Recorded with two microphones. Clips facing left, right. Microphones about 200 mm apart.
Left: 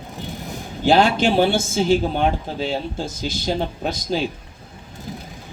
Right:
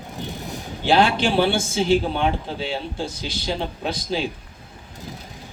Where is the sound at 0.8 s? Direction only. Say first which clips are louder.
Left 2 dB; 45° left (ahead or behind).